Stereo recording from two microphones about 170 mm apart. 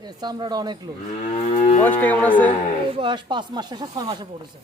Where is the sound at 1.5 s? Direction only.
45° left (ahead or behind).